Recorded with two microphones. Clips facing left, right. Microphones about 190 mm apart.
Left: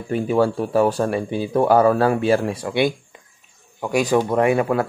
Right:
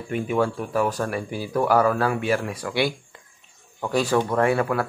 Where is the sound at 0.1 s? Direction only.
35° left (ahead or behind).